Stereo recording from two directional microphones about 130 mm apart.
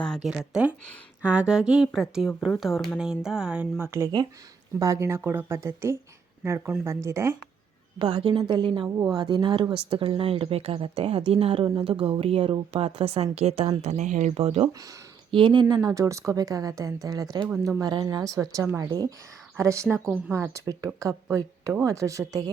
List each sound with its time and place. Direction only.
0.3 s a woman's voice: 10° right (ahead or behind)
7.9 s a woman's voice: 35° right (ahead or behind); by 14.7 s 50° right (ahead or behind)
14.7 s a woman's voice: 25° right (ahead or behind)
15.3 s a woman's voice: 40° right (ahead or behind)
15.7 s a woman's voice: 25° right (ahead or behind)